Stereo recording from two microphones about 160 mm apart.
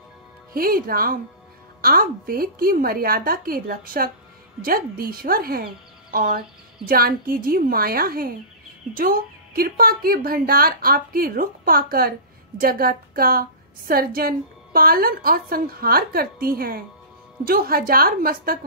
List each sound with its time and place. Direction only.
0.6 s a woman's voice: 65° right (ahead or behind)